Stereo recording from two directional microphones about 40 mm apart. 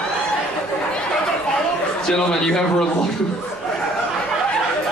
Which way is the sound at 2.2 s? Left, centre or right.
Centre.